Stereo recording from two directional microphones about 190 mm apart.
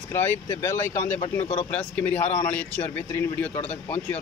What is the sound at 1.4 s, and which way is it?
Speech, 35° left (ahead or behind).